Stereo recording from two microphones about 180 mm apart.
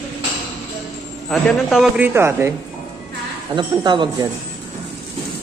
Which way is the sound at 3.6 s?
25° right (ahead or behind).